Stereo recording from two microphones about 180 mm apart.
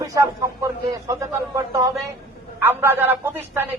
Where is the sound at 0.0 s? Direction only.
15° right (ahead or behind).